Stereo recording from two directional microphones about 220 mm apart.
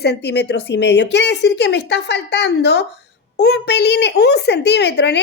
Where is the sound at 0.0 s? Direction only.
50° left (ahead or behind).